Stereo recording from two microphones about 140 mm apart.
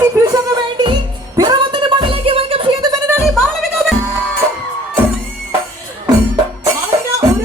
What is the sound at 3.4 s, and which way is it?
Music, centre (ahead or behind).